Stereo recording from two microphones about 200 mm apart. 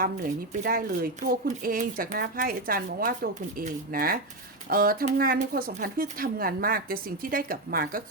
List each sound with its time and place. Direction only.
0.6 s speech: 45° right (ahead or behind)